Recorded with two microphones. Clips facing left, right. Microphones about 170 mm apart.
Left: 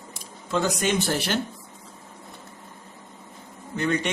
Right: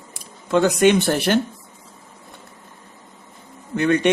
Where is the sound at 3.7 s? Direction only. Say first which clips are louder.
Right 6 dB; 60° right (ahead or behind).